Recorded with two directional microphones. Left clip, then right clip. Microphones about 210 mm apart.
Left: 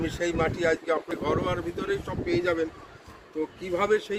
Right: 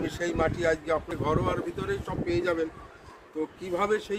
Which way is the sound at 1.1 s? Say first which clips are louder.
Even; 5° right (ahead or behind).